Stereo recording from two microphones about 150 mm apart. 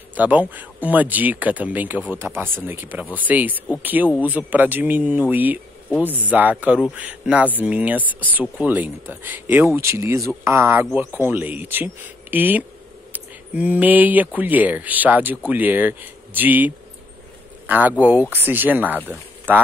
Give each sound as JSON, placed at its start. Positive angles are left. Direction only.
{"t": 0.1, "sound": "speech", "side_deg": -10}
{"t": 5.9, "sound": "speech", "side_deg": 10}
{"t": 6.1, "sound": "speech", "side_deg": -10}